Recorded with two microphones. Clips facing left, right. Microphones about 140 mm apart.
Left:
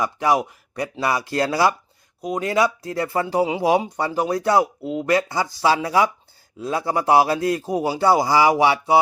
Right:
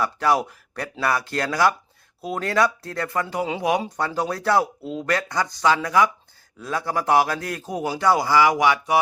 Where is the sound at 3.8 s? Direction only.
15° left (ahead or behind).